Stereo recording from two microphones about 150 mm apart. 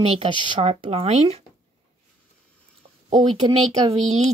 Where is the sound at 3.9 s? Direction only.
45° right (ahead or behind).